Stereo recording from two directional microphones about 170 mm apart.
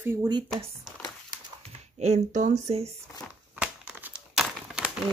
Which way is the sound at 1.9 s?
40° right (ahead or behind).